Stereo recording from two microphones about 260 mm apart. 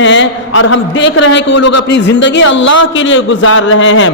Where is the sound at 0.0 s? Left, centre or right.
Left.